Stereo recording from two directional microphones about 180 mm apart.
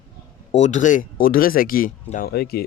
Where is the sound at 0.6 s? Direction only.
45° left (ahead or behind).